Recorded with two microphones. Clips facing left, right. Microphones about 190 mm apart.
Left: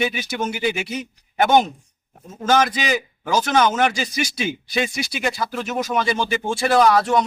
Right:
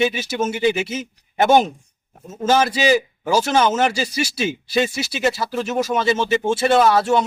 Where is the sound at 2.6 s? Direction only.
30° right (ahead or behind).